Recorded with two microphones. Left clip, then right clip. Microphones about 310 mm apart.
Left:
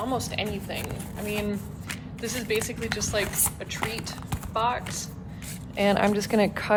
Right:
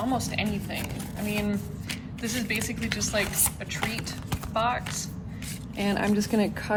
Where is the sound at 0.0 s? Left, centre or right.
Centre.